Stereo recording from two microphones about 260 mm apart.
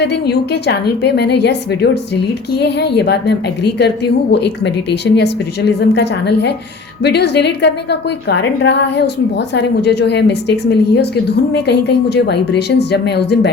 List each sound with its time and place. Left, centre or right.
0.0 s a woman's voice: left